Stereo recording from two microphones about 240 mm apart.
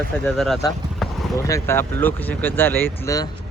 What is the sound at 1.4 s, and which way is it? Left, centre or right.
Speech, centre.